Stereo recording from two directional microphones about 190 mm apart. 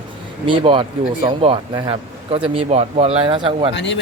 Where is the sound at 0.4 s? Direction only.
25° right (ahead or behind).